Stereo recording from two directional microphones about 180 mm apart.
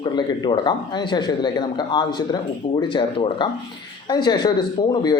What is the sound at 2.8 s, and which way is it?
Speech, 25° left (ahead or behind).